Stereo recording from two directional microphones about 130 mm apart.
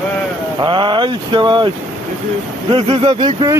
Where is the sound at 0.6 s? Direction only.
40° right (ahead or behind).